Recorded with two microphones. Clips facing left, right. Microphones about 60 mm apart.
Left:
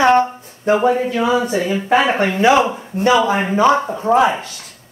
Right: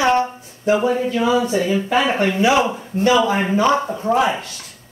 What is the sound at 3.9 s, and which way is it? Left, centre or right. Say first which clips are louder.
Speech: left 4 dB; left.